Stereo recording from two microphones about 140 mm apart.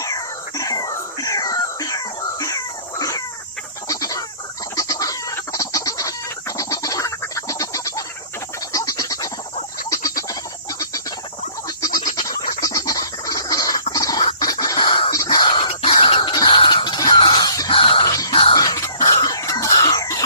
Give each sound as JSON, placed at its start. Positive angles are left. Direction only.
{"t": 0.0, "sound": "wail", "side_deg": 25}
{"t": 3.8, "sound": "chicken", "side_deg": 25}
{"t": 6.6, "sound": "a sound", "side_deg": 25}
{"t": 8.7, "sound": "frog", "side_deg": 25}
{"t": 9.9, "sound": "a sound", "side_deg": 25}
{"t": 12.6, "sound": "bird", "side_deg": 25}
{"t": 13.9, "sound": "rodents", "side_deg": 25}
{"t": 14.3, "sound": "a sound", "side_deg": 25}
{"t": 18.0, "sound": "music", "side_deg": 25}
{"t": 18.5, "sound": "cough", "side_deg": 25}